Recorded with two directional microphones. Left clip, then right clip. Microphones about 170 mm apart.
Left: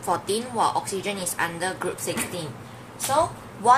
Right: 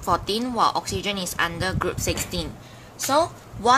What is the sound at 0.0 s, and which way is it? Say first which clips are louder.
Speech: right 2 dB; 40° right (ahead or behind).